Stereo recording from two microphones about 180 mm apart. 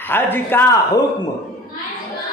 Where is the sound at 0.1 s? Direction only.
10° left (ahead or behind).